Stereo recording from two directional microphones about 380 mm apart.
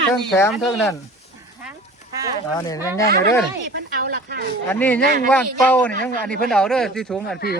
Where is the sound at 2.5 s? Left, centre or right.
Centre.